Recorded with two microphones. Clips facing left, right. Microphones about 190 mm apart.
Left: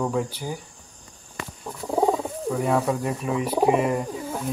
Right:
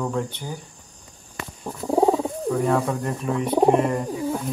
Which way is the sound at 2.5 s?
5° left (ahead or behind).